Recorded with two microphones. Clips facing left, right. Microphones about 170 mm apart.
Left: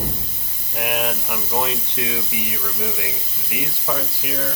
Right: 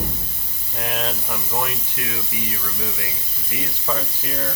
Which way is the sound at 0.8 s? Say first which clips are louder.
Left 3 dB; 15° left (ahead or behind).